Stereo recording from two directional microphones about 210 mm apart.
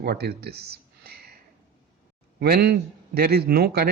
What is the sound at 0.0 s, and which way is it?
Speech, 50° right (ahead or behind).